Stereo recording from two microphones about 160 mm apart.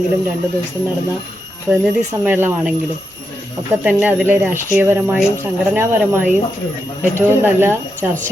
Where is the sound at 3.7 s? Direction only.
10° right (ahead or behind).